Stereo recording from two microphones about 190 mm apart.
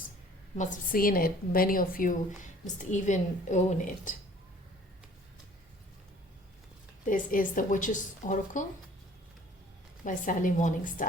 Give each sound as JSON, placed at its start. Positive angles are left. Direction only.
{"t": 0.5, "sound": "a woman's voice", "side_deg": 40}
{"t": 7.0, "sound": "a woman's voice", "side_deg": 45}
{"t": 10.0, "sound": "a woman's voice", "side_deg": 45}